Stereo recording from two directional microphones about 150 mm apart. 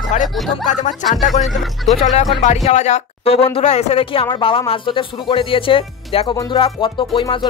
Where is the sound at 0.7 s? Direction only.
55° left (ahead or behind).